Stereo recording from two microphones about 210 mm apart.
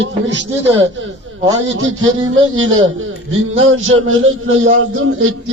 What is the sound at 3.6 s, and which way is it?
A man's voice, 75° right (ahead or behind).